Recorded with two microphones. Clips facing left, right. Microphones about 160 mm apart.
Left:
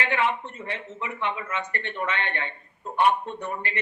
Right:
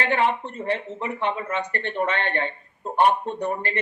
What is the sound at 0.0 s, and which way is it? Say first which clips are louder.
Speech: right 3 dB; 35° right (ahead or behind).